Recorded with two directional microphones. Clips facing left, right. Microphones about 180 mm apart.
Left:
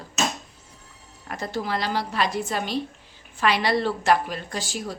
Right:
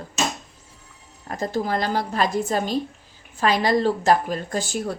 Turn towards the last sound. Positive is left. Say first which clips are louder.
# right 5 dB
turn(degrees=-50)  # may be behind; listen again after turning